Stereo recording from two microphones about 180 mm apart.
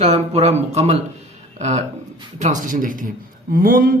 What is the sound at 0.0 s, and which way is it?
Speech, 35° right (ahead or behind).